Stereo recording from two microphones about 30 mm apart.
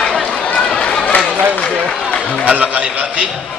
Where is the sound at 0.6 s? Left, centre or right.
Left.